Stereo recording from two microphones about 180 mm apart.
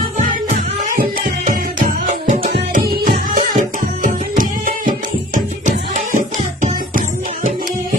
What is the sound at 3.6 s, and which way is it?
Music, 45° right (ahead or behind).